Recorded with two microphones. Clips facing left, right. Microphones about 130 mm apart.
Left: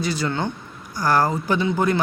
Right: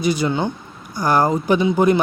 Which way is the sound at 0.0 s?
15° right (ahead or behind).